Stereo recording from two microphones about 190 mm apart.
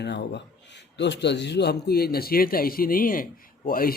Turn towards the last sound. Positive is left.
turn(degrees=50)  # may be behind; listen again after turning